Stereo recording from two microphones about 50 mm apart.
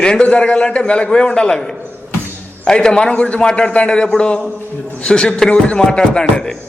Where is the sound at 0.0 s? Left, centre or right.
Centre.